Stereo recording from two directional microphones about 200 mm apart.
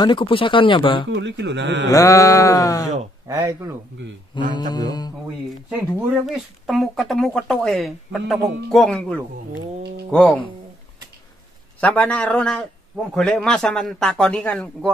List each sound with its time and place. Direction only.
0.0 s speech: 25° left (ahead or behind)
1.1 s a man's voice: 60° right (ahead or behind)
1.9 s sheep: 15° left (ahead or behind)
3.3 s speech: 15° right (ahead or behind)
4.5 s speech: 20° left (ahead or behind)
5.7 s speech: 5° right (ahead or behind)
11.8 s sheep: 5° left (ahead or behind)
13.1 s speech: 5° left (ahead or behind)